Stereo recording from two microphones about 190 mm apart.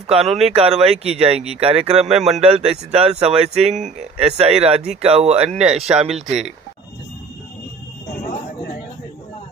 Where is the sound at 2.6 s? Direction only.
30° right (ahead or behind).